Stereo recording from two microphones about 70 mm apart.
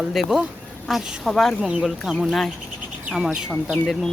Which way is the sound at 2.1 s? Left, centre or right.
Centre.